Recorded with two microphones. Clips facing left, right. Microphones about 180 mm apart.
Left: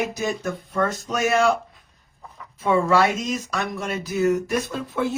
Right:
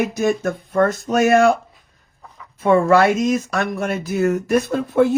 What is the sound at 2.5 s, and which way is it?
Speech, 50° right (ahead or behind).